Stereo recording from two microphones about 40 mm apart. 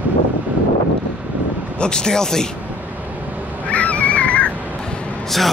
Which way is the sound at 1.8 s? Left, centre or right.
Centre.